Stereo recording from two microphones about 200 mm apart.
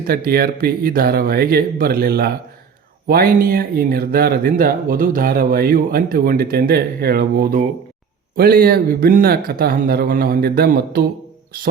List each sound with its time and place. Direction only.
0.1 s speech: 50° right (ahead or behind)